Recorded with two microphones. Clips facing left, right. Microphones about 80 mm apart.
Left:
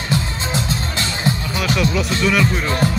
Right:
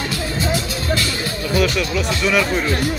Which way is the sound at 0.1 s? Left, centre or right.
Left.